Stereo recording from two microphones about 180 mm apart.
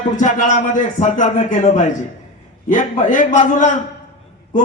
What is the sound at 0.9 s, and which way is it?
Speech, 45° left (ahead or behind).